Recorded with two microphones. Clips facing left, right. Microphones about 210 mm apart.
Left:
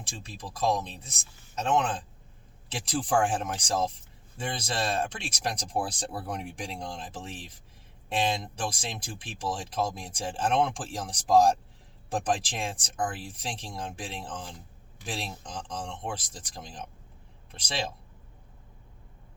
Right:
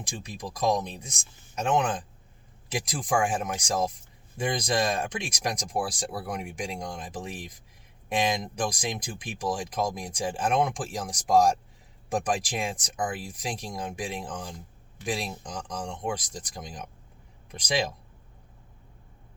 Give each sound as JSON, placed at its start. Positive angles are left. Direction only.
{"t": 0.0, "sound": "speech", "side_deg": -15}
{"t": 2.6, "sound": "speech", "side_deg": -10}